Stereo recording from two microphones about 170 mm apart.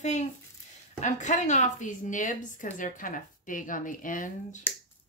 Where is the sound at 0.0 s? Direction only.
40° left (ahead or behind).